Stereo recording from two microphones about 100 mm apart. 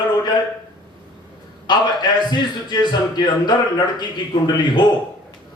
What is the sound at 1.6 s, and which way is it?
A man's voice, 45° left (ahead or behind).